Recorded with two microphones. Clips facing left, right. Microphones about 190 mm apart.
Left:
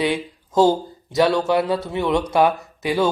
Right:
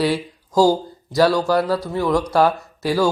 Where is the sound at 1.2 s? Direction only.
20° left (ahead or behind).